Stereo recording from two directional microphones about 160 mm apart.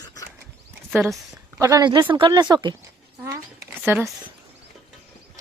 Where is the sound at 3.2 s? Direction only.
20° right (ahead or behind).